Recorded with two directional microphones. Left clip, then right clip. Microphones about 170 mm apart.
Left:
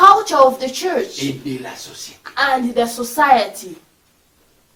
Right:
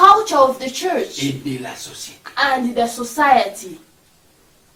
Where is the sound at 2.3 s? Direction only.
35° left (ahead or behind).